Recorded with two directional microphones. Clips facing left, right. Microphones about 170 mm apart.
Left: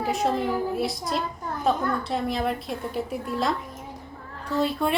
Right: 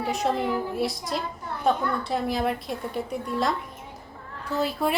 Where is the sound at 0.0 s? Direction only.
Centre (ahead or behind).